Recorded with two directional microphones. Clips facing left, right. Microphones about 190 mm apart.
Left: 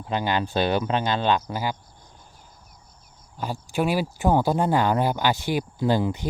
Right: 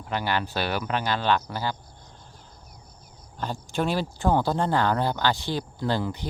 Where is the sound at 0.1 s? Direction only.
20° left (ahead or behind).